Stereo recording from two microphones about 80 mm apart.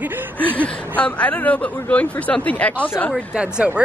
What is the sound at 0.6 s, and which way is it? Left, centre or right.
Speech, centre.